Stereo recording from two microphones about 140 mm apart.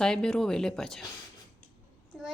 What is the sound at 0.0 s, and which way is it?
Speech, 5° left (ahead or behind).